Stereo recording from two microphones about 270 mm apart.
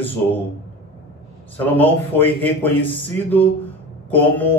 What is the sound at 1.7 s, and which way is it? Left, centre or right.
A man's voice, centre.